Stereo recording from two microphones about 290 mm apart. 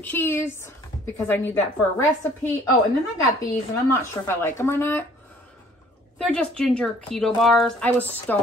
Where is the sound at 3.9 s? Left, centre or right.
Centre.